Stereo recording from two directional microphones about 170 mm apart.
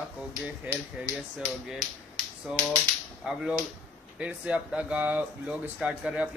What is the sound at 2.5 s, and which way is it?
Speech, 5° right (ahead or behind).